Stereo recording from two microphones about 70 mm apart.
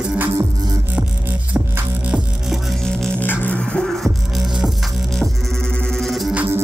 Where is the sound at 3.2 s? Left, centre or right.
Left.